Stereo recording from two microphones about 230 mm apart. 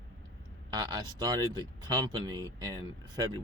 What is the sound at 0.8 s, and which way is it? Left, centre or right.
Speech, centre.